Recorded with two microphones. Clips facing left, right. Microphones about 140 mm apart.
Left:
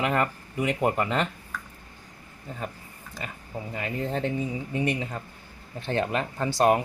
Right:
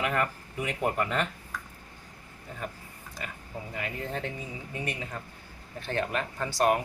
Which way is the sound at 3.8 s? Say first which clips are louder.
Left 6 dB; 30° left (ahead or behind).